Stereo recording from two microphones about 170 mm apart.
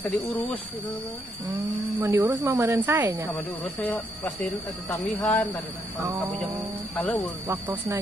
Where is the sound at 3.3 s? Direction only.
10° left (ahead or behind).